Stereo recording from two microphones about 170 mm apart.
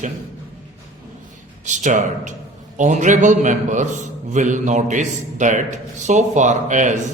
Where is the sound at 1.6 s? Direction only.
45° right (ahead or behind).